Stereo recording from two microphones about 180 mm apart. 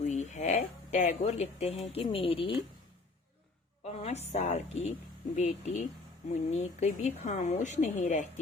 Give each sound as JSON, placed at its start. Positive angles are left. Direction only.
{"t": 0.0, "sound": "speech", "side_deg": 40}
{"t": 3.8, "sound": "a woman's voice", "side_deg": 35}